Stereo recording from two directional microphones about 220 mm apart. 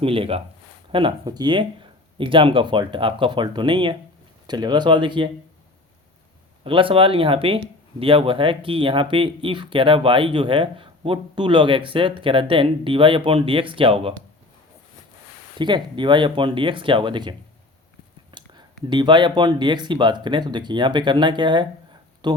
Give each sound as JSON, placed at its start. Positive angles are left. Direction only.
{"t": 0.0, "sound": "speech", "side_deg": -25}
{"t": 6.7, "sound": "speech", "side_deg": -25}
{"t": 15.5, "sound": "speech", "side_deg": -20}